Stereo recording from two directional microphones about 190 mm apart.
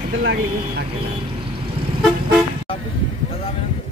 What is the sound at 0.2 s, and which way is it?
Speech, 65° right (ahead or behind).